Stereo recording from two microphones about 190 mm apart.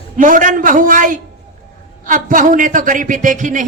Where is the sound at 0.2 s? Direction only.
45° right (ahead or behind).